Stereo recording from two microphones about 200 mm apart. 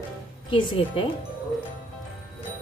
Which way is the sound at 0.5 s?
25° left (ahead or behind).